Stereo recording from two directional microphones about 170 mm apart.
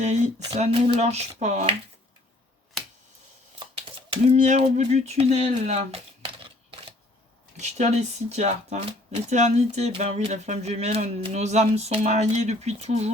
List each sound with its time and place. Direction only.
0.0 s speech: 40° right (ahead or behind)
3.8 s a sound: 30° right (ahead or behind)
4.4 s speech: 45° right (ahead or behind)